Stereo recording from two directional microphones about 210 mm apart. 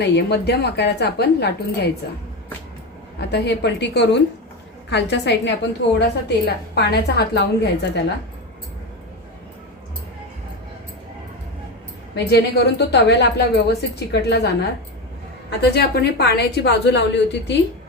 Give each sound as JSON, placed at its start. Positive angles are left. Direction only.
{"t": 0.0, "sound": "a woman's voice", "side_deg": 50}
{"t": 3.2, "sound": "a woman's voice", "side_deg": 50}
{"t": 12.1, "sound": "a woman's voice", "side_deg": 50}